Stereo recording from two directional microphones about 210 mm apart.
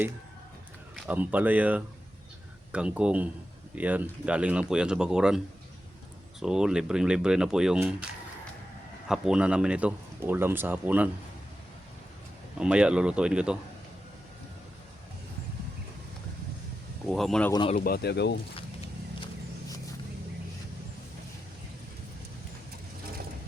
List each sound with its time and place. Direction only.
0.9 s speech: 10° right (ahead or behind)
6.4 s speech: 5° right (ahead or behind)
9.0 s speech: 5° right (ahead or behind)
12.5 s speech: 5° right (ahead or behind)
17.1 s speech: centre (ahead or behind)
17.5 s speech: 20° left (ahead or behind)
17.7 s speech: 45° left (ahead or behind)
18.5 s walk: 25° left (ahead or behind)